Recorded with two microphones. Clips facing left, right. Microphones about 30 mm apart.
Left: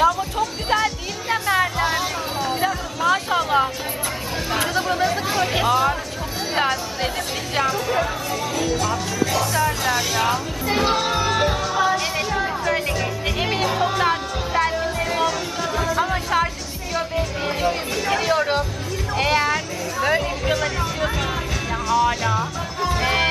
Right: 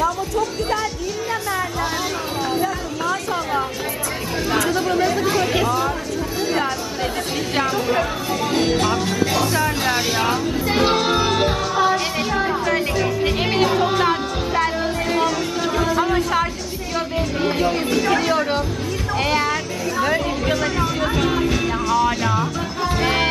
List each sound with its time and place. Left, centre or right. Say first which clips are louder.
1.3 s music: left 6 dB; left
3.1 s a sound: left 4 dB; left
4.6 s chatter: even; centre
7.5 s speech: right 1 dB; centre
8.5 s music: right 4 dB; right
9.3 s speech: right 1 dB; centre
10.2 s music: right 2 dB; centre
16.0 s speech: even; centre